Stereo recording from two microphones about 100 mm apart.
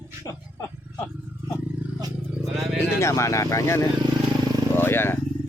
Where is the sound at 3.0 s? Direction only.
30° left (ahead or behind).